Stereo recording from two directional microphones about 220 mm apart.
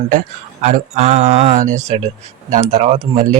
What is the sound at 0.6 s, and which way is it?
A man's voice, 35° right (ahead or behind).